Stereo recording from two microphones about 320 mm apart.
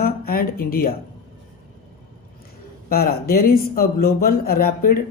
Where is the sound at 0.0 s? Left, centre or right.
Left.